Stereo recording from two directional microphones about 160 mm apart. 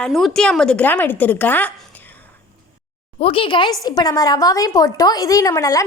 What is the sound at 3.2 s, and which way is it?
Speech, 35° left (ahead or behind).